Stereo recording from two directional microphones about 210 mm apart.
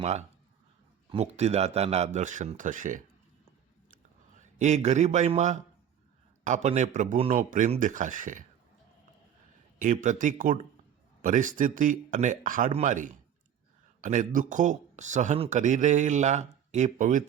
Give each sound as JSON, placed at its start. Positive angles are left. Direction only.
{"t": 0.0, "sound": "speech", "side_deg": -35}
{"t": 3.9, "sound": "a sound", "side_deg": -35}
{"t": 6.4, "sound": "speech", "side_deg": -35}
{"t": 9.7, "sound": "speech", "side_deg": -40}